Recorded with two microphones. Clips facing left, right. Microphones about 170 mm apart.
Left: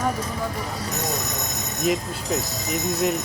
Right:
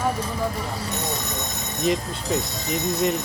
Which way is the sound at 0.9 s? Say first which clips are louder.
Left 1 dB; 30° right (ahead or behind).